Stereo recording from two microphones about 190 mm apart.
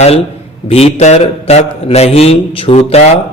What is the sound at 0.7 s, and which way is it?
A man's voice, 35° left (ahead or behind).